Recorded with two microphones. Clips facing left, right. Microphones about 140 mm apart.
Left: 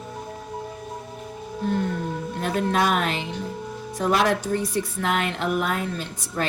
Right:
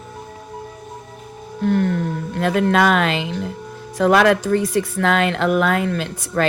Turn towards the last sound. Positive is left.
turn(degrees=-80)